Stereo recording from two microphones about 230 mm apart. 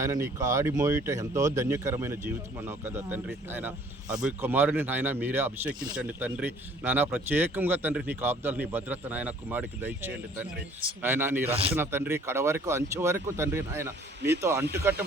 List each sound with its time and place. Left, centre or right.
0.0 s speech: centre
11.5 s speech: right
11.8 s speech: centre